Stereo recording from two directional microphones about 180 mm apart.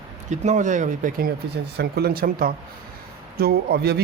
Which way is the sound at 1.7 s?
60° right (ahead or behind).